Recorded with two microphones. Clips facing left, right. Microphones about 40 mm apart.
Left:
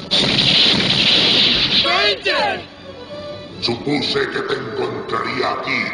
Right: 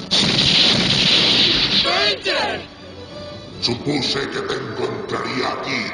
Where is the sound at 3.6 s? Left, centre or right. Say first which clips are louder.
Left 1 dB; centre.